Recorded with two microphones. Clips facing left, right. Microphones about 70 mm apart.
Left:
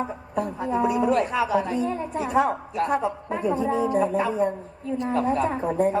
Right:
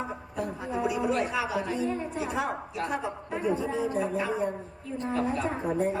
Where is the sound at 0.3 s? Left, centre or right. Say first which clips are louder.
Left 7 dB; left.